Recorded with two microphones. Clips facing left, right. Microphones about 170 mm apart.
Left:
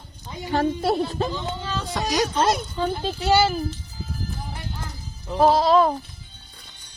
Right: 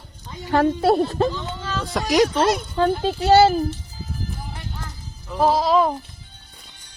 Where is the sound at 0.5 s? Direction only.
55° right (ahead or behind).